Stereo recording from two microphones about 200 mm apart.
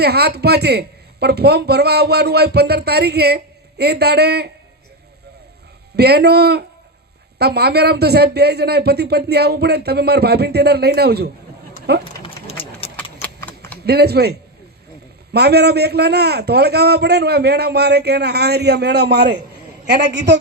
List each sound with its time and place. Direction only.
0.0 s speech: 55° right (ahead or behind)
6.0 s speech: 55° right (ahead or behind)
12.1 s a sound: 25° left (ahead or behind)
12.8 s clip-clop: 30° left (ahead or behind)
13.2 s typing: 10° left (ahead or behind)
13.8 s a man's voice: 55° right (ahead or behind)